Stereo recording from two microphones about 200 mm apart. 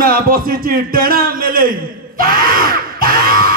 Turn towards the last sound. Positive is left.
turn(degrees=-45)  # may be behind; listen again after turning